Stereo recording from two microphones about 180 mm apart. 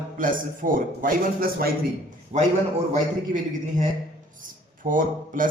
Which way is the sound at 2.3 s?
40° right (ahead or behind).